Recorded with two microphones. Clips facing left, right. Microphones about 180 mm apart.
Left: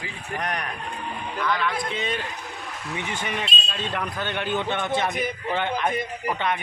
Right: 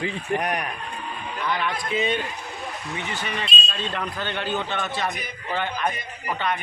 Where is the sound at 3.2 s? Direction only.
10° left (ahead or behind).